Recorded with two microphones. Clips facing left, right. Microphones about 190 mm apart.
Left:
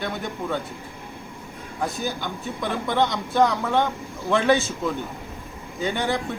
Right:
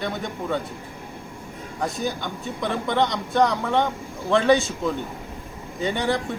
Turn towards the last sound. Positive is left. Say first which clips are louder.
# right 1 dB
turn(degrees=0)  # may be behind; listen again after turning